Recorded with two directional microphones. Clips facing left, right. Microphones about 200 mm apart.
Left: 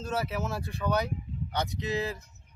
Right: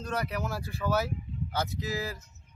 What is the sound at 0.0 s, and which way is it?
Speech, 5° left (ahead or behind).